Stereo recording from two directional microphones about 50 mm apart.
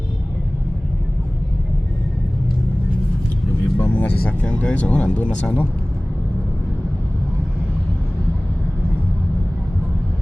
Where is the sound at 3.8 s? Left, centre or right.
Left.